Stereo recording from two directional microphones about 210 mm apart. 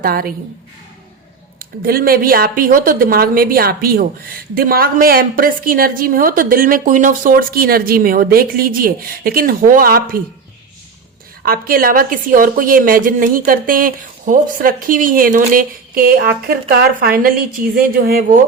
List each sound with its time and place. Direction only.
0.0 s a woman's voice: 45° right (ahead or behind)
1.5 s a woman's voice: 45° right (ahead or behind)
11.4 s a woman's voice: 45° right (ahead or behind)